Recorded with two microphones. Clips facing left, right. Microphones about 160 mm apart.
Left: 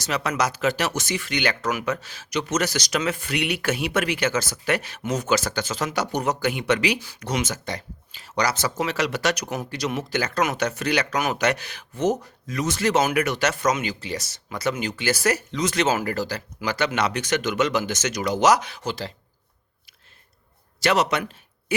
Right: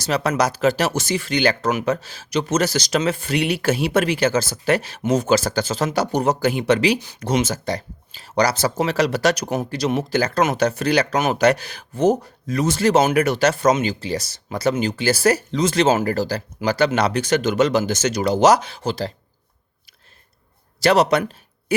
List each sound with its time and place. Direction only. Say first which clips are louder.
0.0 s speech: right 5 dB; 35° right (ahead or behind)
20.8 s speech: right 6 dB; 35° right (ahead or behind)